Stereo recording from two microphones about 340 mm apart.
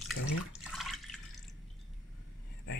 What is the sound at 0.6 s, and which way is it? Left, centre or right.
Water, centre.